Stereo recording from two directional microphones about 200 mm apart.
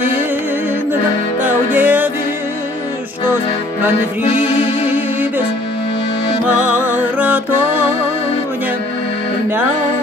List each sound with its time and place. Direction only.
1.4 s music: 10° right (ahead or behind)
4.3 s music: 30° left (ahead or behind)
6.9 s music: 10° right (ahead or behind)